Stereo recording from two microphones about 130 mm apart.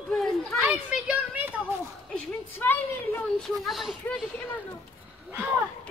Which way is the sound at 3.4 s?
Centre (ahead or behind).